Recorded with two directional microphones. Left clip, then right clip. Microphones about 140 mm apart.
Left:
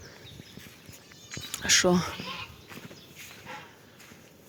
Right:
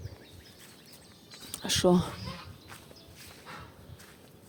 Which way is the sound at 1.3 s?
20° right (ahead or behind).